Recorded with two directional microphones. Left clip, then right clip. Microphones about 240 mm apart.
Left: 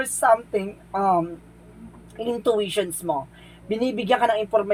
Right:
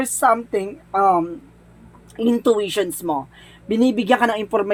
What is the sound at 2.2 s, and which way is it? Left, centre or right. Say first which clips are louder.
Speech: right 4 dB; right.